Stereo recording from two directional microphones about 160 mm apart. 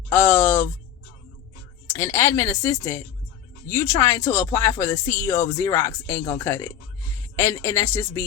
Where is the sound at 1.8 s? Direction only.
15° left (ahead or behind).